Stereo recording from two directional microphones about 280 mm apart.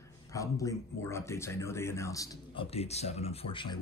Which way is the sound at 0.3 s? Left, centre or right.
Centre.